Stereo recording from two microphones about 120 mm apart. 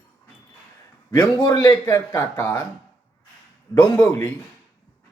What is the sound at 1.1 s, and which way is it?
Speech, 35° left (ahead or behind).